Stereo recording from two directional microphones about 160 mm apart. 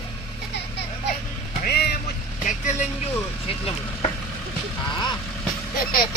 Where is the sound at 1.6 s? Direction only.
80° left.